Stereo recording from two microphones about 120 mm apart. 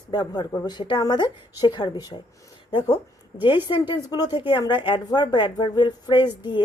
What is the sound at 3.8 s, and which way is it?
Speech, 30° left (ahead or behind).